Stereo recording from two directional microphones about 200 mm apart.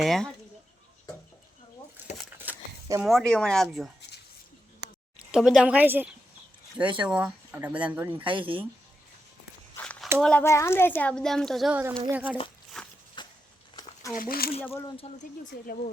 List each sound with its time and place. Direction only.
0.0 s speech: centre (ahead or behind)
2.4 s a sound: 15° right (ahead or behind)
3.0 s speech: centre (ahead or behind)
5.3 s speech: 5° right (ahead or behind)
6.7 s speech: 25° right (ahead or behind)
7.2 s speech: 5° right (ahead or behind)
8.1 s speech: 25° right (ahead or behind)
9.7 s a sound: 5° left (ahead or behind)
10.2 s speech: 5° left (ahead or behind)
12.7 s a sound: 5° left (ahead or behind)
13.2 s a sound: 25° left (ahead or behind)
14.1 s speech: 45° left (ahead or behind)
15.1 s speech: 30° left (ahead or behind)
15.4 s speech: 45° left (ahead or behind)